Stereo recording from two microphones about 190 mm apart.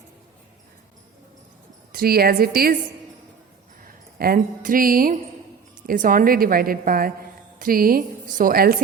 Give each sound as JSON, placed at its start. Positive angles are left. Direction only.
{"t": 1.9, "sound": "a woman's voice", "side_deg": -50}
{"t": 3.8, "sound": "a woman's voice", "side_deg": -50}